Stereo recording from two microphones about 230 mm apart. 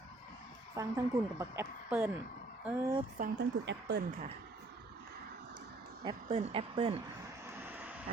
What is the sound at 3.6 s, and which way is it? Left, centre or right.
Speech, right.